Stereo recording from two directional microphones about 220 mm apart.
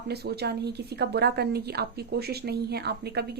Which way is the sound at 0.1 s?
45° right (ahead or behind).